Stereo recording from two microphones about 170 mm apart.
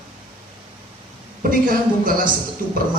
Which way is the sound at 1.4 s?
55° right (ahead or behind).